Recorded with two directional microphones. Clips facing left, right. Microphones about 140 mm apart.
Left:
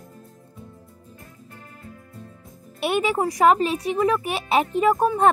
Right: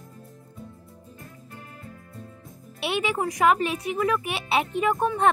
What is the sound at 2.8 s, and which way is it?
Speech, 45° left (ahead or behind).